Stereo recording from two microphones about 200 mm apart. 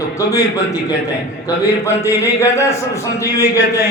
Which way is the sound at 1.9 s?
15° left (ahead or behind).